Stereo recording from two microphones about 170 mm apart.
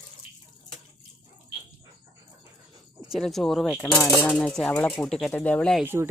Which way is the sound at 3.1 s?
Centre (ahead or behind).